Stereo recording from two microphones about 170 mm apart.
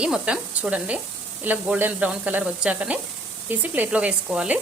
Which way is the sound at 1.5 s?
10° right (ahead or behind).